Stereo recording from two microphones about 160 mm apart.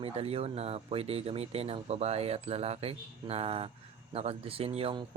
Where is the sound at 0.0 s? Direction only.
40° right (ahead or behind).